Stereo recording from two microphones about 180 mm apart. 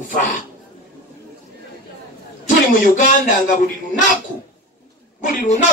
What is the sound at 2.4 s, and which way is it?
Speech, 50° left (ahead or behind).